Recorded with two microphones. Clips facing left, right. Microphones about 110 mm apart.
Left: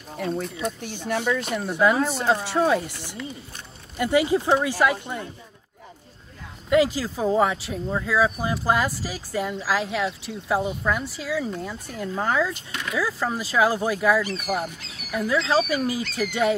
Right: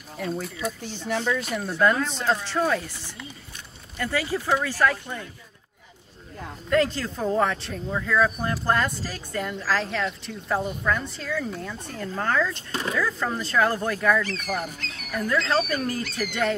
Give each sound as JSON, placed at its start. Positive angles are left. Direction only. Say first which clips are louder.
{"t": 0.2, "sound": "speech", "louder": "left 2 dB", "side_deg": 0}
{"t": 6.7, "sound": "speech", "louder": "left 3 dB", "side_deg": 5}